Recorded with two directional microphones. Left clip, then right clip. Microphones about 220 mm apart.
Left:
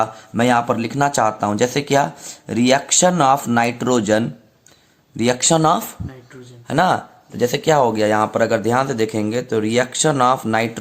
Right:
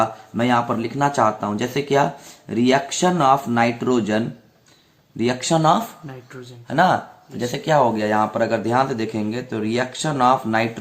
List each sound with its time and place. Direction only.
0.0 s speech: 45° left (ahead or behind)